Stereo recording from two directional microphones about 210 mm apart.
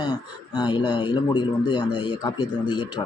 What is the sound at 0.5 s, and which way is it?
Speech, 20° left (ahead or behind).